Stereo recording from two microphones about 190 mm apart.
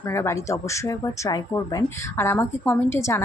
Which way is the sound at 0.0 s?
15° left (ahead or behind).